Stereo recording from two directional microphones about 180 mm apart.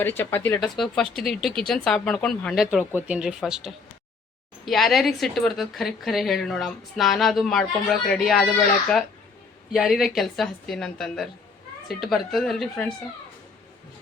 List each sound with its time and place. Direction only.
0.0 s a woman's voice: 10° left (ahead or behind)
9.7 s a woman's voice: centre (ahead or behind)